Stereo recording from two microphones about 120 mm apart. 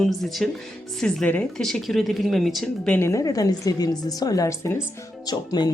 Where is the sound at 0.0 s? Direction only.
Centre (ahead or behind).